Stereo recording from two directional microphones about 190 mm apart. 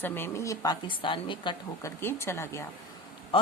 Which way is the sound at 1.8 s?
15° left (ahead or behind).